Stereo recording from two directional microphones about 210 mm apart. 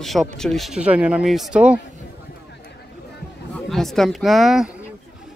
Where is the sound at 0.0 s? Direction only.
Centre (ahead or behind).